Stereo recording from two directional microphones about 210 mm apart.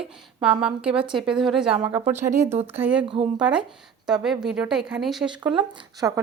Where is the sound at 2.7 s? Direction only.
10° right (ahead or behind).